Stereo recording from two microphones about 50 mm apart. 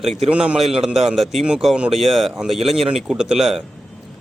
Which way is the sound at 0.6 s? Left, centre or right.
Centre.